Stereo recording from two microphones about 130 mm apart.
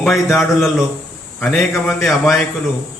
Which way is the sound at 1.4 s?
20° left (ahead or behind).